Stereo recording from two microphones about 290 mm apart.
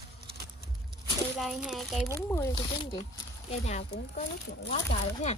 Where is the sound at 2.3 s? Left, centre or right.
Centre.